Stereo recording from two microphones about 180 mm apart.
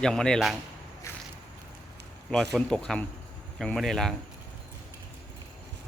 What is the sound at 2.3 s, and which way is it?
Speech, centre (ahead or behind).